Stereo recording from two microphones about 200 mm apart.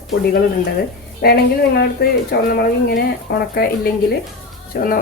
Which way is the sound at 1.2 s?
55° left (ahead or behind).